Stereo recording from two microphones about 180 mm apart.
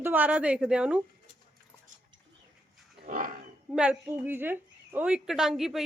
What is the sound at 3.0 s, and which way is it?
Dog, 50° right (ahead or behind).